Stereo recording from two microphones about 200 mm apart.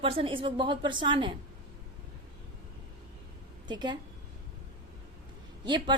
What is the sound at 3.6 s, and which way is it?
Speech, 20° right (ahead or behind).